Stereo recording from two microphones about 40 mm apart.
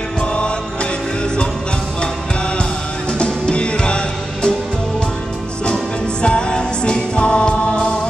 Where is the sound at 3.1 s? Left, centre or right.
Left.